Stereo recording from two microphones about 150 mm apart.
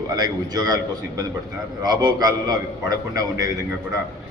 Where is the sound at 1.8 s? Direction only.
25° right (ahead or behind).